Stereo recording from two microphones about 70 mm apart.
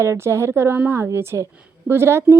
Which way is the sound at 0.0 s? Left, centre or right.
Right.